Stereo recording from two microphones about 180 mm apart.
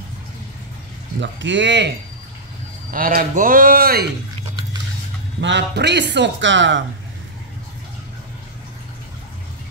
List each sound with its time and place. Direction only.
1.2 s speech: 85° right
2.9 s a man's voice: 50° right (ahead or behind)
5.4 s speech: 75° right (ahead or behind)